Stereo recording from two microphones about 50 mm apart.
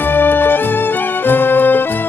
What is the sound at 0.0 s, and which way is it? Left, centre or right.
Music, left.